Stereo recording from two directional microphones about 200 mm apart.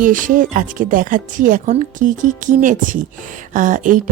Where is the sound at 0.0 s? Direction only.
40° right (ahead or behind).